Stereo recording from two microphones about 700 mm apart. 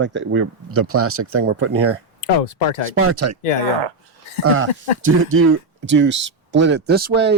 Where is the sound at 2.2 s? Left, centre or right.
Left.